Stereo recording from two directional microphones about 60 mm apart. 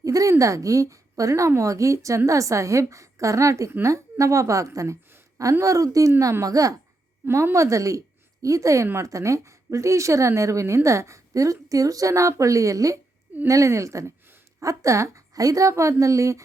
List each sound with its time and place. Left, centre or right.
0.0 s a woman's voice: right
7.3 s a woman's voice: right
7.5 s a woman's voice: right